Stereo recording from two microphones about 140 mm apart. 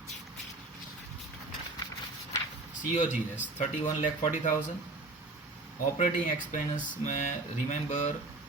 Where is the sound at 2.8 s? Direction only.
60° left (ahead or behind).